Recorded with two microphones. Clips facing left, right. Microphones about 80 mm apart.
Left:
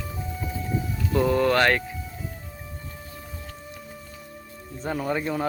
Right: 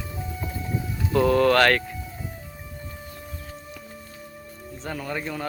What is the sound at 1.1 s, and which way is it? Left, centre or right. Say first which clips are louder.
Speech: right 2 dB; centre.